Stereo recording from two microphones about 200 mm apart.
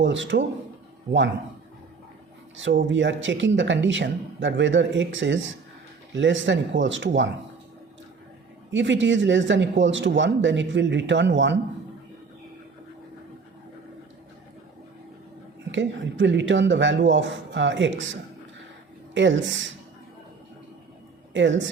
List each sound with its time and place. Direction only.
0.0 s speech: 70° right (ahead or behind)
2.6 s speech: 70° right (ahead or behind)
8.7 s a man's voice: 65° right (ahead or behind)
15.7 s speech: 65° right (ahead or behind)
21.3 s speech: 65° right (ahead or behind)